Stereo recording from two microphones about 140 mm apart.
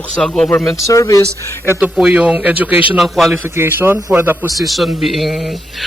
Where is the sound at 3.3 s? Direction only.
15° right (ahead or behind).